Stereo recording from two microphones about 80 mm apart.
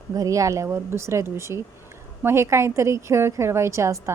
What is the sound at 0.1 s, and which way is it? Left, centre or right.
A woman's voice, right.